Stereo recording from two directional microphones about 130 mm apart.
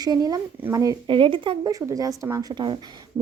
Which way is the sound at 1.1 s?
40° right (ahead or behind).